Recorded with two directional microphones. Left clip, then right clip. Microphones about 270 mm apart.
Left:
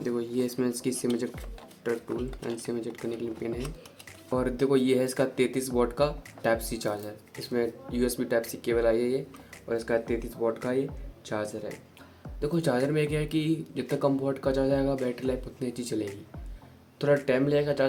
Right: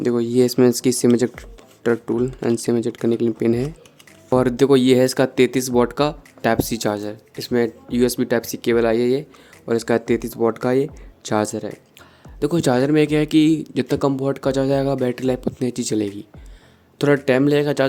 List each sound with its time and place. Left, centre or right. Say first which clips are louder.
0.0 s speech: right 12 dB; right
17.2 s speech: right 8 dB; right